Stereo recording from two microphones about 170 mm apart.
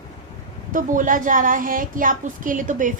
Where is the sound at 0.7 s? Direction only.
50° right (ahead or behind).